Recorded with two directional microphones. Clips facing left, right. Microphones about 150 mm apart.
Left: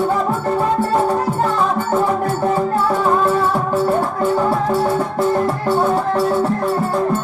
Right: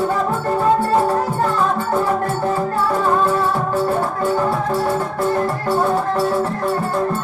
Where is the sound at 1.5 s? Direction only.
Centre (ahead or behind).